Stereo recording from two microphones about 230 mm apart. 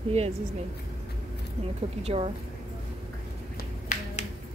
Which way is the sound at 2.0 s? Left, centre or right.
Right.